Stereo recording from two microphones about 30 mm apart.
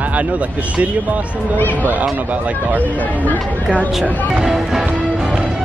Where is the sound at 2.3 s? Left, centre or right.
Right.